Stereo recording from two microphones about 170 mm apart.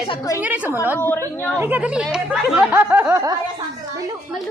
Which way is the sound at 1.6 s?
10° right (ahead or behind).